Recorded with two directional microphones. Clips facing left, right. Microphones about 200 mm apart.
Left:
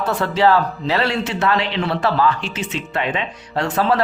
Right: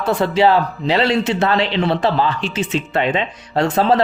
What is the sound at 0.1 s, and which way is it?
A man's voice, 15° right (ahead or behind).